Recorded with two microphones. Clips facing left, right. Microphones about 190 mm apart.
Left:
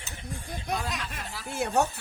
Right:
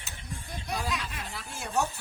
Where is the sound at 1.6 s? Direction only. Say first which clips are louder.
Left 10 dB; 65° left (ahead or behind).